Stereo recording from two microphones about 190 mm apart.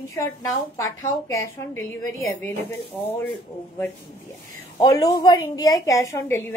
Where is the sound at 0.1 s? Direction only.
15° left (ahead or behind).